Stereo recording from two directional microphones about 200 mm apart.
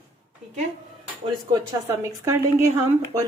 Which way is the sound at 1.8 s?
15° right (ahead or behind).